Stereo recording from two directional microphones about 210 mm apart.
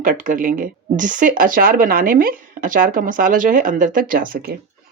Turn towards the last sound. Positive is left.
turn(degrees=-45)  # may be behind; listen again after turning